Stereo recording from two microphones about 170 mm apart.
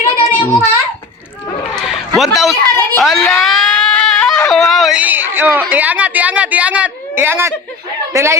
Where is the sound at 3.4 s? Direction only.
Centre (ahead or behind).